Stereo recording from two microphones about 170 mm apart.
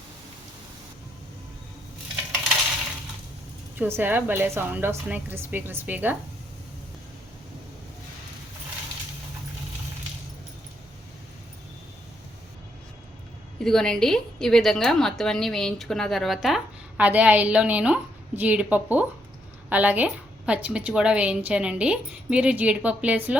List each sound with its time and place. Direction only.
3.8 s a woman's voice: 10° right (ahead or behind)
13.6 s a woman's voice: 5° left (ahead or behind)